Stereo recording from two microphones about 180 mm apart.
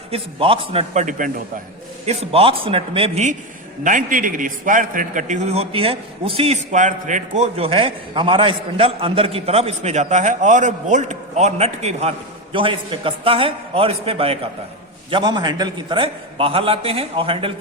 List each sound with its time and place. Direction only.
0.1 s a man's voice: 30° right (ahead or behind)
2.0 s a man's voice: 30° right (ahead or behind)
3.8 s a man's voice: 45° right (ahead or behind); by 17.5 s 30° right (ahead or behind)